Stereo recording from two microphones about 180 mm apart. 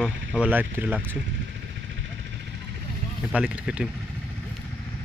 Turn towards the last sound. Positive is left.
turn(degrees=-5)  # may be behind; listen again after turning